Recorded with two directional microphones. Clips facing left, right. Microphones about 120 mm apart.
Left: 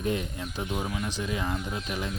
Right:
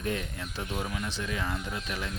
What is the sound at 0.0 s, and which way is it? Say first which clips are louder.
Speech: left 3 dB; 20° left (ahead or behind).